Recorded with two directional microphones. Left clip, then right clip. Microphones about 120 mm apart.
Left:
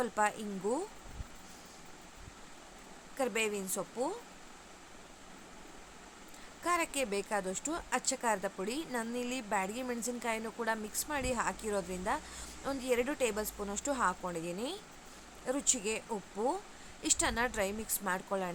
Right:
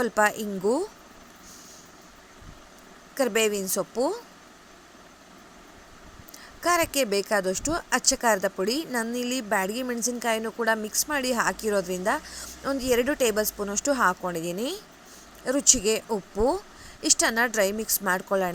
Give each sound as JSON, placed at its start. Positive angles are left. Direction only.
{"t": 0.0, "sound": "a woman's voice", "side_deg": -45}
{"t": 3.2, "sound": "a woman's voice", "side_deg": -45}
{"t": 6.6, "sound": "a woman's voice", "side_deg": -45}
{"t": 17.0, "sound": "a woman's voice", "side_deg": -40}